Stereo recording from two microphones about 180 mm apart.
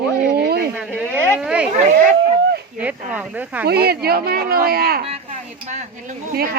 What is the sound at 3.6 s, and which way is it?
Speech, 60° right (ahead or behind).